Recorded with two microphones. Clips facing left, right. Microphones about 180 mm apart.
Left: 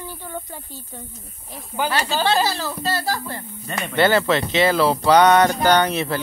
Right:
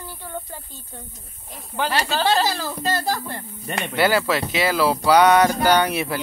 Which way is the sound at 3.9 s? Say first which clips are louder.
Left 2 dB; 5° right (ahead or behind).